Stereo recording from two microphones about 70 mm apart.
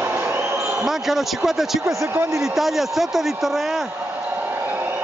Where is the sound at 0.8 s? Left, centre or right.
Centre.